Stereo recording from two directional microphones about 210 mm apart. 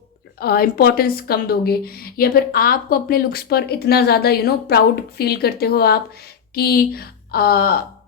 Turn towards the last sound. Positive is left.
turn(degrees=45)  # may be behind; listen again after turning